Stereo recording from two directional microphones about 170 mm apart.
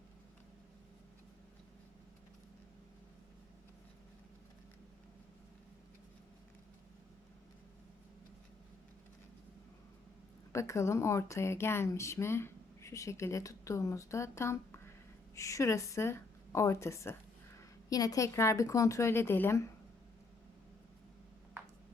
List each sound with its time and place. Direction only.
10.5 s speech: 15° left (ahead or behind)